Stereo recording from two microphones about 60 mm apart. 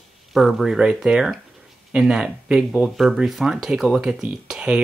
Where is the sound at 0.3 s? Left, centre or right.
Centre.